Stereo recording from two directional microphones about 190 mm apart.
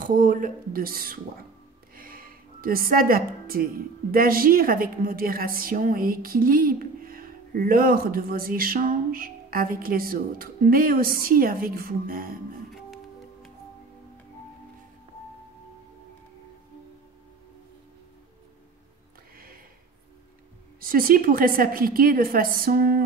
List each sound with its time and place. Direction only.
0.0 s a woman's voice: 45° right (ahead or behind)
2.0 s a sound: 50° right (ahead or behind)
3.4 s a woman's voice: 50° right (ahead or behind)
12.7 s music: centre (ahead or behind)
19.3 s a sound: 50° right (ahead or behind)
20.8 s a woman's voice: 50° right (ahead or behind)